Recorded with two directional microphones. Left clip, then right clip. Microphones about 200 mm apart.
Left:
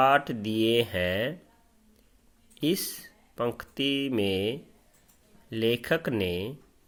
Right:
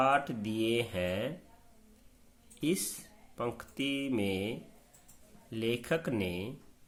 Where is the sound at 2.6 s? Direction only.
35° left (ahead or behind).